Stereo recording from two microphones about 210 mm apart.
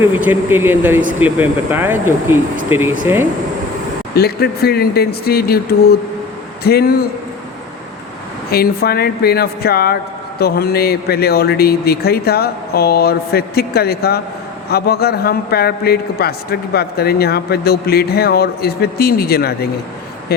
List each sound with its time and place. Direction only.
0.1 s speech: 10° right (ahead or behind)
4.1 s speech: 50° left (ahead or behind)
8.4 s speech: 50° left (ahead or behind)